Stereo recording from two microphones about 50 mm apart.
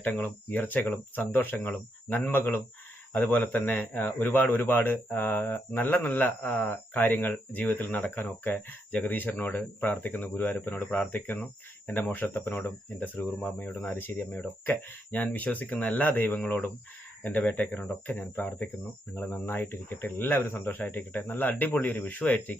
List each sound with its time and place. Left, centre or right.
0.0 s speech: left
8.9 s speech: left
10.9 s speech: left
11.9 s speech: left
13.4 s speech: left
14.0 s speech: left
14.3 s speech: left